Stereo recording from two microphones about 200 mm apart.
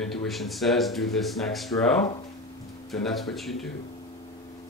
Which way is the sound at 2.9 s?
Centre (ahead or behind).